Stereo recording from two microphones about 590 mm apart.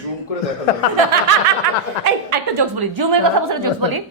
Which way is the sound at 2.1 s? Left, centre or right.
Right.